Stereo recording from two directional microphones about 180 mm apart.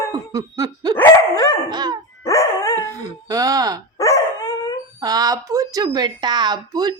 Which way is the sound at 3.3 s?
20° right (ahead or behind).